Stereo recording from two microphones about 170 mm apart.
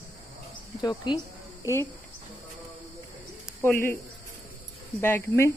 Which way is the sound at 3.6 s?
15° left (ahead or behind).